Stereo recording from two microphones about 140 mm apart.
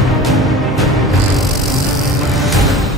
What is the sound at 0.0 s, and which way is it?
Music, centre (ahead or behind).